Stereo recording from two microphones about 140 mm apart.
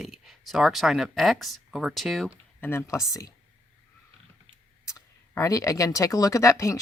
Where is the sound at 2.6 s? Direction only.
15° left (ahead or behind).